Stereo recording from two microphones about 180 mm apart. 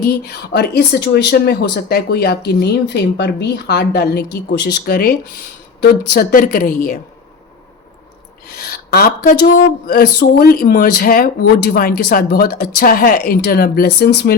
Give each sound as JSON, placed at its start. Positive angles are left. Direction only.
{"t": 0.0, "sound": "a woman's voice", "side_deg": 60}
{"t": 8.5, "sound": "speech", "side_deg": 60}